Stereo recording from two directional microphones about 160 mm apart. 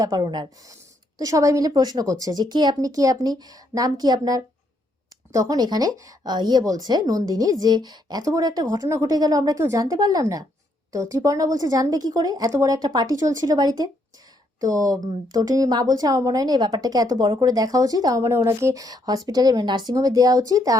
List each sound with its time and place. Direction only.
0.0 s a woman's voice: 25° right (ahead or behind)